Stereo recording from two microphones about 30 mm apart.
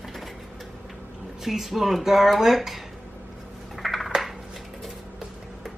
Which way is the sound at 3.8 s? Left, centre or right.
Centre.